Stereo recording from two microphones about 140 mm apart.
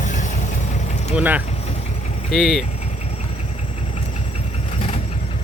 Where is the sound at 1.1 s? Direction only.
10° right (ahead or behind).